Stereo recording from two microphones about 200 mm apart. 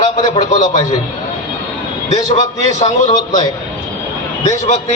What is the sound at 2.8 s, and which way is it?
Speech, 35° left (ahead or behind).